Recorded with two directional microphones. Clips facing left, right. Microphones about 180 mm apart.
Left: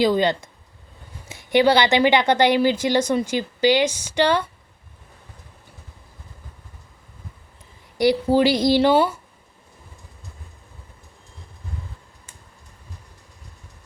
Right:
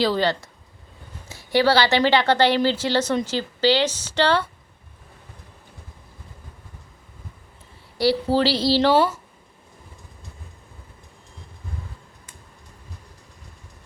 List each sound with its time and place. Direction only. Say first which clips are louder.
0.0 s speech: left 3 dB; 20° left (ahead or behind)
7.9 s speech: left 2 dB; 15° left (ahead or behind)